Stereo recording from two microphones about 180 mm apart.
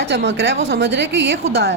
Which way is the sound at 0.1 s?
80° right.